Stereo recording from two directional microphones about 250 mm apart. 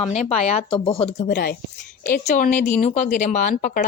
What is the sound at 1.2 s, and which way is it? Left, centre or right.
Speech, left.